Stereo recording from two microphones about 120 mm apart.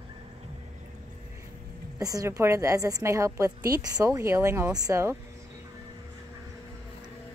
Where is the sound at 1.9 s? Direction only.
30° right (ahead or behind).